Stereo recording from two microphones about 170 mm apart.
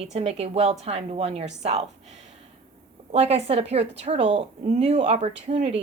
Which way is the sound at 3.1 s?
40° right (ahead or behind).